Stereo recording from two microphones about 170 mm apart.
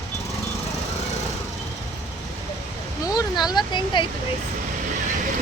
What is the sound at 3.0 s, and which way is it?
Speech, 25° left (ahead or behind).